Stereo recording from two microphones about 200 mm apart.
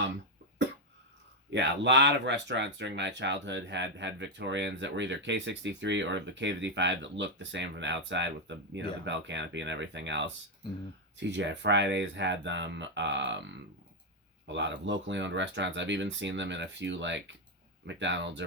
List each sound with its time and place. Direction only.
1.5 s speech: 60° right (ahead or behind)